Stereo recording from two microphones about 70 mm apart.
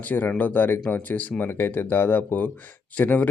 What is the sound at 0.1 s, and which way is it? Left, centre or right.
Speech, left.